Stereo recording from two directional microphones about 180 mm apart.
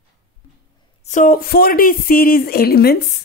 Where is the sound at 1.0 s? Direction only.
45° left (ahead or behind).